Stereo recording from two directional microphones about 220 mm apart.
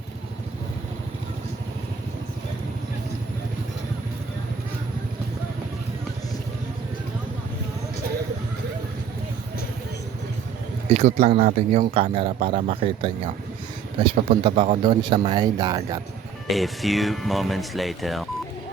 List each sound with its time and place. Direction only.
10.8 s a man's voice: 30° right (ahead or behind)
11.9 s a man's voice: 25° right (ahead or behind)
16.5 s speech: centre (ahead or behind)